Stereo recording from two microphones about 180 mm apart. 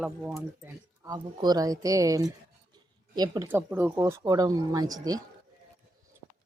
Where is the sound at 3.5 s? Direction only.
10° right (ahead or behind).